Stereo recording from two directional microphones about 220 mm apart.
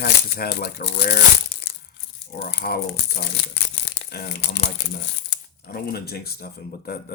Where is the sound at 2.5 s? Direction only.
45° left (ahead or behind).